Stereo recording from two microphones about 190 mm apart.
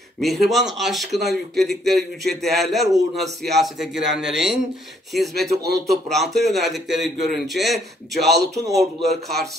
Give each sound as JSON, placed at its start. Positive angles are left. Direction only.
{"t": 0.2, "sound": "a man's voice", "side_deg": 0}
{"t": 8.4, "sound": "a man's voice", "side_deg": -20}
{"t": 9.1, "sound": "a man's voice", "side_deg": 0}